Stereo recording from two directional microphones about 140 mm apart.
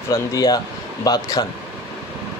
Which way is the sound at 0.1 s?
25° left (ahead or behind).